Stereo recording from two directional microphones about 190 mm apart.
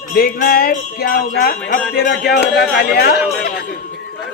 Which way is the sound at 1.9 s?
55° left (ahead or behind).